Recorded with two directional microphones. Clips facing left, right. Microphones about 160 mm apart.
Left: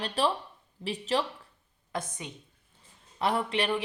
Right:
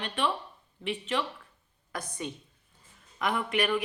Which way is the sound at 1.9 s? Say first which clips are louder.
Even; 20° left (ahead or behind).